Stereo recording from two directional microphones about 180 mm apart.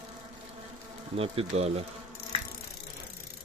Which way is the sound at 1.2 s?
35° right (ahead or behind).